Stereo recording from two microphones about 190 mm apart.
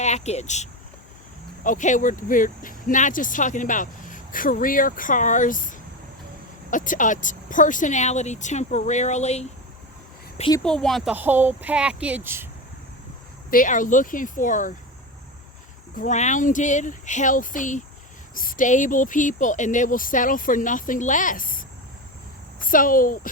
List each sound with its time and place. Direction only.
0.0 s speech: 35° left (ahead or behind)
10.6 s speech: 5° left (ahead or behind)
11.1 s speech: 10° right (ahead or behind)
13.5 s speech: 45° left (ahead or behind)
16.0 s speech: 40° left (ahead or behind)
22.6 s speech: 45° left (ahead or behind)